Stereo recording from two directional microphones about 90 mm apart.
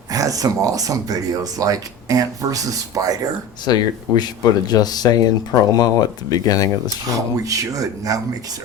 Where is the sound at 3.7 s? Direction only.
45° left (ahead or behind).